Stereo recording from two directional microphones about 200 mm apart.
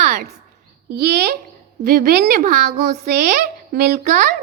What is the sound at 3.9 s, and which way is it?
Speech, 35° right (ahead or behind).